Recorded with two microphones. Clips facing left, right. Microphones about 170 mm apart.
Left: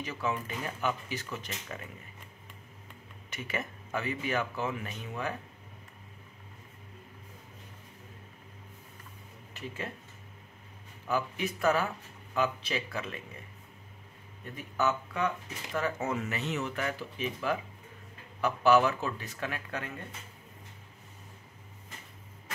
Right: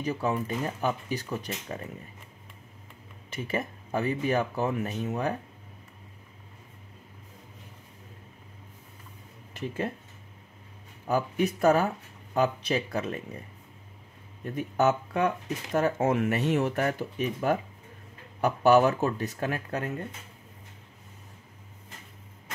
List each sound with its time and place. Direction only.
0.0 s speech: 40° right (ahead or behind)
3.3 s speech: 30° right (ahead or behind)
11.1 s speech: 40° right (ahead or behind)
14.4 s speech: 45° right (ahead or behind)